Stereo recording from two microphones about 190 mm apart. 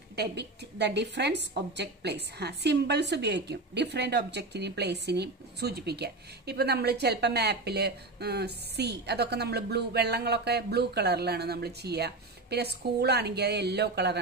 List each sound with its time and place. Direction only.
0.1 s a woman's voice: 60° right (ahead or behind)